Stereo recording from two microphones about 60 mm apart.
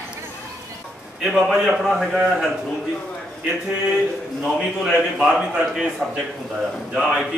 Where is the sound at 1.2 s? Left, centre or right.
Centre.